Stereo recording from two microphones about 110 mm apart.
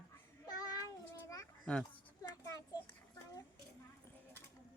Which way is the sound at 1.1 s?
30° left (ahead or behind).